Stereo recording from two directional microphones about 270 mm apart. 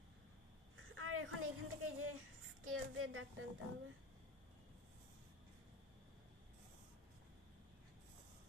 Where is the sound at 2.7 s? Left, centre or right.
Right.